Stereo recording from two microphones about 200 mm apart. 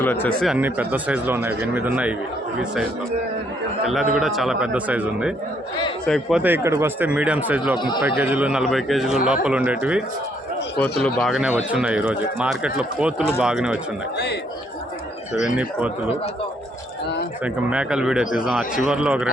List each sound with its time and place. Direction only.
0.0 s speech: 10° left (ahead or behind); by 2.1 s 5° right (ahead or behind)
4.2 s speech: centre (ahead or behind)
10.8 s speech: 5° left (ahead or behind)
15.4 s speech: 5° right (ahead or behind)
17.4 s speech: 5° right (ahead or behind)